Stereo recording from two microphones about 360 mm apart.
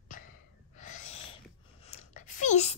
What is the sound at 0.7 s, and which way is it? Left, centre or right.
Owl, centre.